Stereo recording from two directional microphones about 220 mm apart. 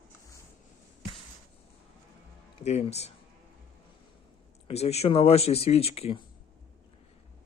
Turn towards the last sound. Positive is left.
turn(degrees=25)  # may be behind; listen again after turning